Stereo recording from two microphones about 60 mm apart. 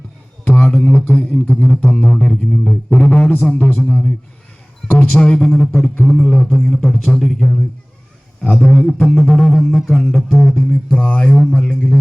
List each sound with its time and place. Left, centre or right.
0.4 s a sound: centre
1.6 s music: centre
3.5 s speech: left
3.8 s music: centre
4.9 s speech: left
5.2 s music: centre
6.2 s speech: centre
8.9 s music: centre
10.9 s speech: left
11.7 s music: left